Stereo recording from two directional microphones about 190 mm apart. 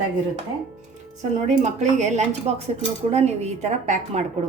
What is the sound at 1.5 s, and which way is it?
A woman's voice, 35° right (ahead or behind).